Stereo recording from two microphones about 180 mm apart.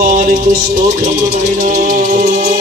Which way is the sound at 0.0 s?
45° right (ahead or behind).